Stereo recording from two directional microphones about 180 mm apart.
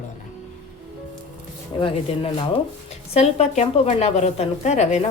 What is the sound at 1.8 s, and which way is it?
A woman's voice, 30° left (ahead or behind).